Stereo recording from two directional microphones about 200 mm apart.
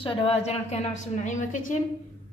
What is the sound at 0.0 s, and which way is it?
A woman's voice, 25° left (ahead or behind).